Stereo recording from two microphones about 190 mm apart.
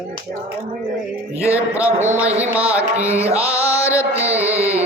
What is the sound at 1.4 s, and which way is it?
Speech, 15° left (ahead or behind).